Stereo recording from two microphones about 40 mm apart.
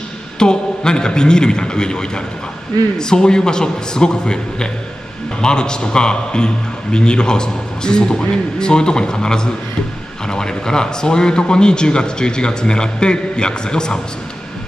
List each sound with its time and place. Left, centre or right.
0.4 s a man's voice: centre